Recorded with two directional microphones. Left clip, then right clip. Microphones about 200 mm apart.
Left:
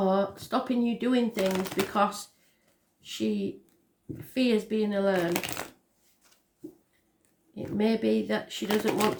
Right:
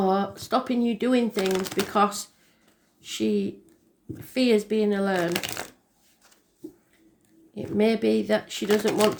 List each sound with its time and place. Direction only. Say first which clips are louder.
0.0 s speech: right 2 dB; 40° right (ahead or behind)
1.5 s speech: right 3 dB; 15° right (ahead or behind)
1.9 s speech: right 6 dB; 40° right (ahead or behind)
5.3 s speech: right 2 dB; 15° right (ahead or behind)
7.5 s speech: right 5 dB; 40° right (ahead or behind)
8.6 s speech: right 4 dB; 15° right (ahead or behind)